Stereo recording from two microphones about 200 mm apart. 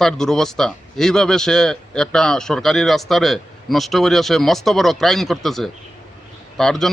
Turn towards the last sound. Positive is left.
turn(degrees=0)  # may be behind; listen again after turning